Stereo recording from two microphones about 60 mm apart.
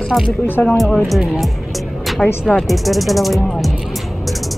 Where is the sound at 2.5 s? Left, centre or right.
Centre.